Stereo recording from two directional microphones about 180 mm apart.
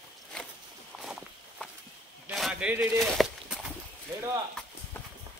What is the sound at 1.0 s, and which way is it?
Walk, centre (ahead or behind).